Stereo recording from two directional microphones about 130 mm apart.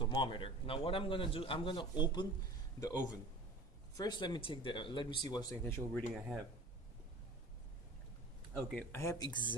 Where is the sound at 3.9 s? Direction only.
35° left (ahead or behind).